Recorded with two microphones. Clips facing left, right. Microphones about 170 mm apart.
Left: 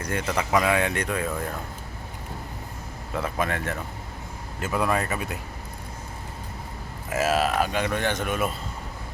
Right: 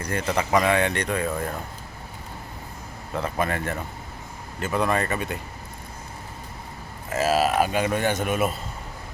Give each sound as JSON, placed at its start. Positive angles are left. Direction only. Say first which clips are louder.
{"t": 0.0, "sound": "speech", "louder": "right 2 dB", "side_deg": 0}
{"t": 3.2, "sound": "speech", "louder": "right 1 dB", "side_deg": 0}
{"t": 7.1, "sound": "a man's voice", "louder": "right 2 dB", "side_deg": 0}